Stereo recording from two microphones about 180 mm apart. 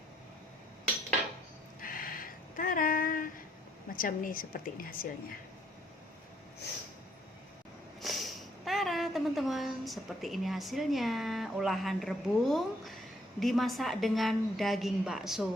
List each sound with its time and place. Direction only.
1.8 s a sound: 50° left (ahead or behind)
3.9 s a woman's voice: 50° left (ahead or behind)
8.0 s a woman's voice: centre (ahead or behind)